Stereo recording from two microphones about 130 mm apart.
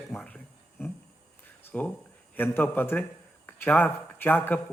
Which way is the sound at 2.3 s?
15° left (ahead or behind).